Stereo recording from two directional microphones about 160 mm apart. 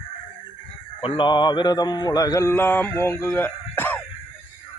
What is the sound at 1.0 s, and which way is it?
Mantra, 30° left (ahead or behind).